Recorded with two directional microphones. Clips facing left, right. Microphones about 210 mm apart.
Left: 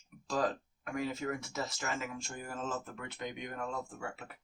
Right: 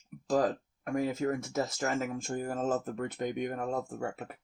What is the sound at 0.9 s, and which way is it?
Speech, 45° right (ahead or behind).